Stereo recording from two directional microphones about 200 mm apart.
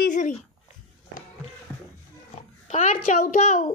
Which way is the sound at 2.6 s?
35° left (ahead or behind).